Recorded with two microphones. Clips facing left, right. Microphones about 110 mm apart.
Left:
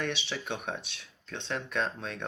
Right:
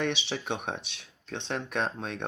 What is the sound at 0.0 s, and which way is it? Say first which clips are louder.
Speech: right 4 dB; 60° right (ahead or behind).